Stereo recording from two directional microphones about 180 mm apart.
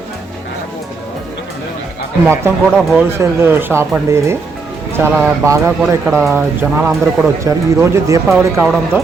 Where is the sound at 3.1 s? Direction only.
15° right (ahead or behind).